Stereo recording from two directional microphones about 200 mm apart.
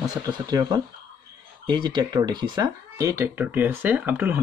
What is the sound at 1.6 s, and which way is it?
Speech, 20° right (ahead or behind).